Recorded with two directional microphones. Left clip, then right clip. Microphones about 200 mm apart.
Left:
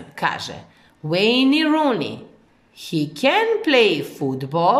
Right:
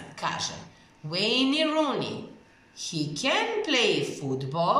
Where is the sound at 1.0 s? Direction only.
50° left (ahead or behind).